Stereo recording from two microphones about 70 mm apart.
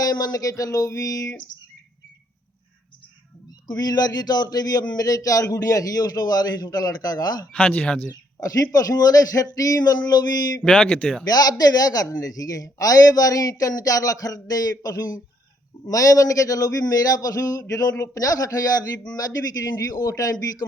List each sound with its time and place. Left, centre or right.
0.0 s a man's voice: left
3.7 s speech: left
7.5 s speech: centre
8.4 s a man's voice: left
10.6 s speech: centre
11.3 s a man's voice: left
15.9 s a man's voice: left